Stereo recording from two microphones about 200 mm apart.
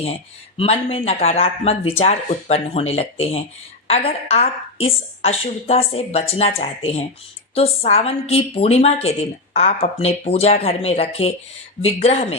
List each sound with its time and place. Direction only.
0.0 s a woman's voice: 30° left (ahead or behind)